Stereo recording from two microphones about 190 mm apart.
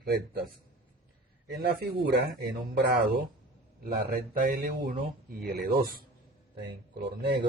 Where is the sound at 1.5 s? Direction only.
55° right (ahead or behind).